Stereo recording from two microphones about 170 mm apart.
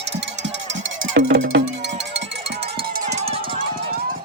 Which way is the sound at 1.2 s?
85° right.